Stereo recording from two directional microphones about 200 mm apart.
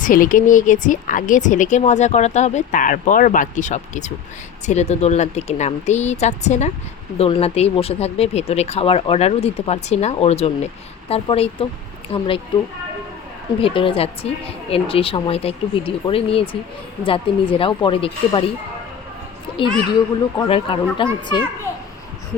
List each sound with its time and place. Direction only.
0.0 s speech: 45° left (ahead or behind); by 12.4 s 25° left (ahead or behind)
13.6 s speech: 25° left (ahead or behind)
20.5 s speech: 25° left (ahead or behind)